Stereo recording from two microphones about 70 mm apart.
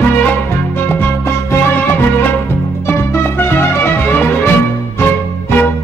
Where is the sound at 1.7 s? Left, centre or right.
Left.